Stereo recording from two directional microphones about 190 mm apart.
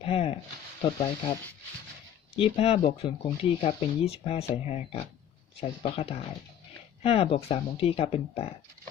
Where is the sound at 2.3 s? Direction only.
30° left (ahead or behind).